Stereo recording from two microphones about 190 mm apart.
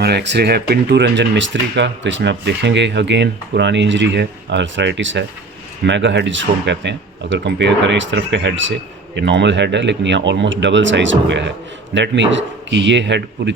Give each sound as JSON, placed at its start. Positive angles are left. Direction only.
{"t": 0.0, "sound": "speech", "side_deg": -60}